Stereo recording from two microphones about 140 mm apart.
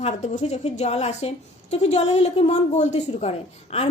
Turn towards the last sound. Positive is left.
turn(degrees=45)  # may be behind; listen again after turning